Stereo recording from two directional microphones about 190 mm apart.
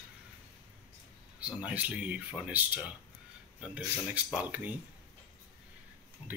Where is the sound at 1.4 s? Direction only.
5° right (ahead or behind).